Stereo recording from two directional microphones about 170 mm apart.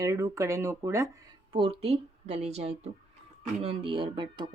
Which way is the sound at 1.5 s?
30° right (ahead or behind).